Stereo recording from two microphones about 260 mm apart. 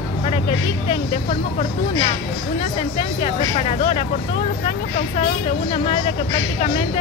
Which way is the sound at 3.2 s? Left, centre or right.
Left.